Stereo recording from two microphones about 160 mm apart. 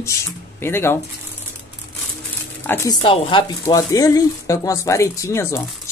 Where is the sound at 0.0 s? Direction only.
15° left (ahead or behind).